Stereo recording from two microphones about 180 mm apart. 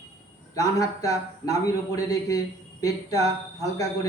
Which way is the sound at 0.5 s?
20° left (ahead or behind).